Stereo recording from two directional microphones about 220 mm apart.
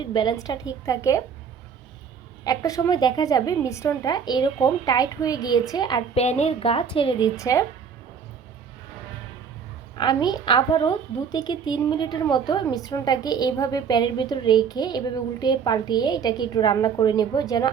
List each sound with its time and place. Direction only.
0.0 s a woman's voice: 20° left (ahead or behind)
2.4 s a woman's voice: 15° left (ahead or behind)
6.2 s a woman's voice: 30° left (ahead or behind); by 7.6 s 15° left (ahead or behind)
10.0 s a woman's voice: 20° left (ahead or behind)